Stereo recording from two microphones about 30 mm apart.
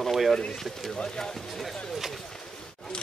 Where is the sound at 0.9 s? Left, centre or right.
Left.